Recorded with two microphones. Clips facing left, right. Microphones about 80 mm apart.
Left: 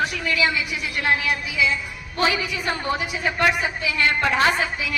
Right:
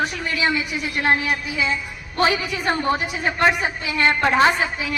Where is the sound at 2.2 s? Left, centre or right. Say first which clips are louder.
Right 2 dB; right.